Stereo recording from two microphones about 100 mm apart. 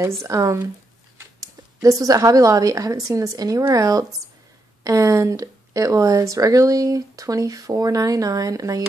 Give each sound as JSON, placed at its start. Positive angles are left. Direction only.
{"t": 1.4, "sound": "speech", "side_deg": -35}